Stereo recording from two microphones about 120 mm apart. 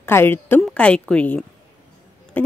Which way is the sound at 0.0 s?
20° left (ahead or behind).